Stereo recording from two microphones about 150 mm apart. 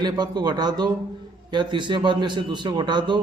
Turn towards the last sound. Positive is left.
turn(degrees=-30)  # may be behind; listen again after turning